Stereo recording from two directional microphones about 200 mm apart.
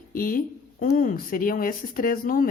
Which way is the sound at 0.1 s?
45° left (ahead or behind).